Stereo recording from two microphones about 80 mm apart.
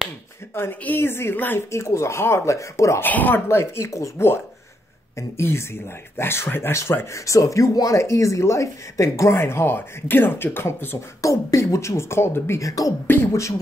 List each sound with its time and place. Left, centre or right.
0.6 s speech: left
1.7 s speech: left
3.0 s speech: left
3.4 s speech: left
5.4 s speech: left
11.1 s speech: left
13.0 s speech: left
13.3 s speech: left